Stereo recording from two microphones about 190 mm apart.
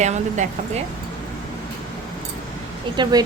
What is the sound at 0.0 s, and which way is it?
Speech, 40° right (ahead or behind).